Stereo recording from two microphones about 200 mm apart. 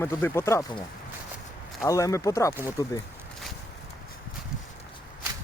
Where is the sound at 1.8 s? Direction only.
15° left (ahead or behind).